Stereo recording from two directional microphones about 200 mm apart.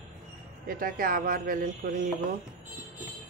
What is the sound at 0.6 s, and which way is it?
A man's voice, 45° right (ahead or behind).